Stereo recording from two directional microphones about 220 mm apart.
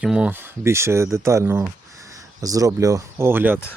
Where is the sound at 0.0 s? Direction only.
5° right (ahead or behind).